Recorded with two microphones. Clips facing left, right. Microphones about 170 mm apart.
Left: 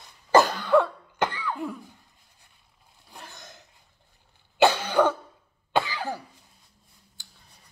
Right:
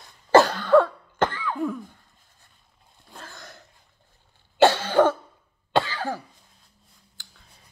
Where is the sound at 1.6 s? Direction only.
15° left (ahead or behind).